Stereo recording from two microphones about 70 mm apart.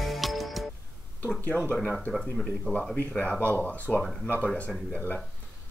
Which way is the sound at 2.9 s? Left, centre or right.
Centre.